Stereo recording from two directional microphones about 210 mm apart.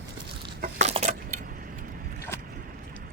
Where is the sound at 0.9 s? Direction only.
30° right (ahead or behind).